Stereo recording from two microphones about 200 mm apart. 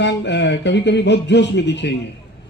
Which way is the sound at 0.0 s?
60° left (ahead or behind).